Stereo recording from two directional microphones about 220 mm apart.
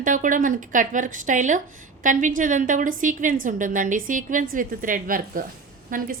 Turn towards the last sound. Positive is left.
turn(degrees=-40)  # may be behind; listen again after turning